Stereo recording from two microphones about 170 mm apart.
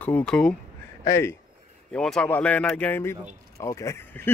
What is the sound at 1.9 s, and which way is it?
Speech, 5° left (ahead or behind).